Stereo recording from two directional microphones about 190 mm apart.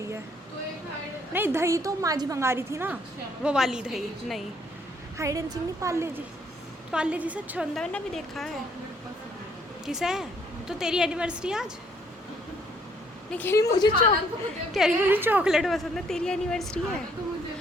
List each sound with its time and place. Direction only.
1.3 s a woman's voice: 10° right (ahead or behind)
5.1 s a woman's voice: 15° right (ahead or behind); by 8.5 s centre (ahead or behind)
9.8 s a woman's voice: 5° right (ahead or behind)
13.3 s a woman's voice: 10° left (ahead or behind)
14.7 s a woman's voice: 5° right (ahead or behind)